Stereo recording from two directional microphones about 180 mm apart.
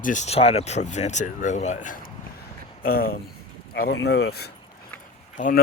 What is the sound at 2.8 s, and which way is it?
Speech, 55° left (ahead or behind).